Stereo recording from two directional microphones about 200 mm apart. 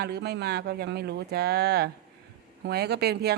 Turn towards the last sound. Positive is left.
turn(degrees=-55)  # may be behind; listen again after turning